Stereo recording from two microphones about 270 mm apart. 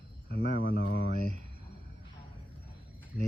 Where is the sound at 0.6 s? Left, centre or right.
Left.